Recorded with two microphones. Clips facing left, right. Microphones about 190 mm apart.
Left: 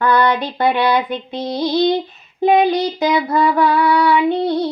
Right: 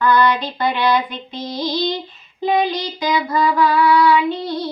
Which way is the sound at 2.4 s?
55° left (ahead or behind).